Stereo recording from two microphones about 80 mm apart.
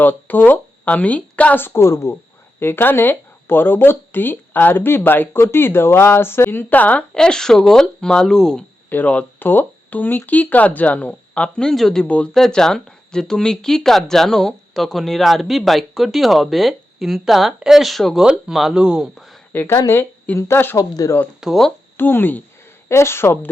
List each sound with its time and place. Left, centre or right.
0.0 s speech: left
7.1 s speech: centre
8.9 s speech: left; by 12.0 s centre
12.0 s speech: centre
19.6 s speech: left
20.7 s speech: left
21.4 s speech: centre
21.9 s speech: left